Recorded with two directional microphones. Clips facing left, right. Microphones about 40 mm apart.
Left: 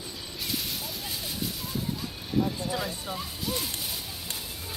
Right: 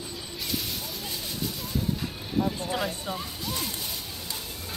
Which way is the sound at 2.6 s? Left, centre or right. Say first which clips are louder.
Right 2 dB; right.